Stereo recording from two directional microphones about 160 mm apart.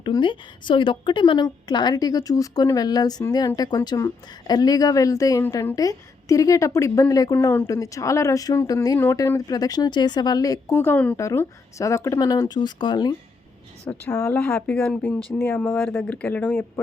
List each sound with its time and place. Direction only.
0.0 s a woman's voice: 30° left (ahead or behind)
13.9 s speech: 15° left (ahead or behind)